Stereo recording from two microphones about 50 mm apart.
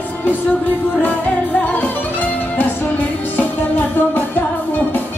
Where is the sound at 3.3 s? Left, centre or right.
Left.